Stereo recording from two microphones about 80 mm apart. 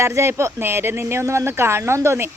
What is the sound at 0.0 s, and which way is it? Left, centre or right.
Speech, right.